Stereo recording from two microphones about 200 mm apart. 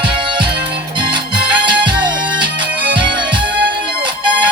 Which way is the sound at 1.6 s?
25° right (ahead or behind).